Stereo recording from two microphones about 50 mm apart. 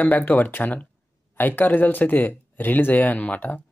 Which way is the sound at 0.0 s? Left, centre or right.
Left.